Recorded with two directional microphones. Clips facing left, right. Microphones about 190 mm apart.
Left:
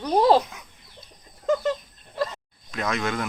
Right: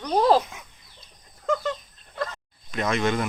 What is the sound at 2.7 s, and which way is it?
Speech, centre (ahead or behind).